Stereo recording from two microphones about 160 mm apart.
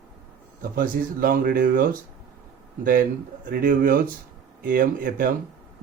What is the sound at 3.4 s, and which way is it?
Speech, 60° right (ahead or behind).